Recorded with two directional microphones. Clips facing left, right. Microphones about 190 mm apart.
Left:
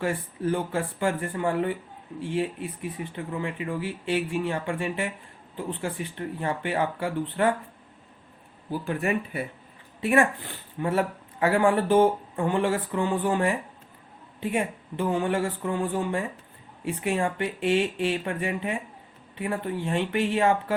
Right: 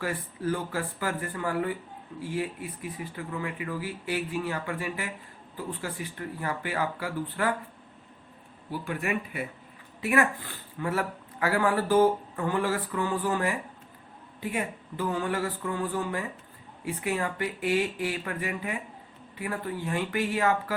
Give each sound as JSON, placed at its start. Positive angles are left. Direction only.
{"t": 0.0, "sound": "speech", "side_deg": 25}
{"t": 8.8, "sound": "speech", "side_deg": 30}